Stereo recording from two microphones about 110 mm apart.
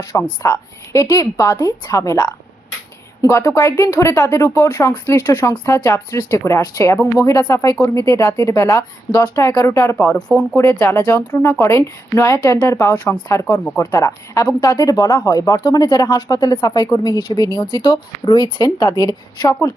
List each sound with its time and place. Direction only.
0.1 s speech: 25° left (ahead or behind)
10.1 s speech: 10° left (ahead or behind)
10.5 s speech: 25° left (ahead or behind)
13.1 s speech: 35° left (ahead or behind)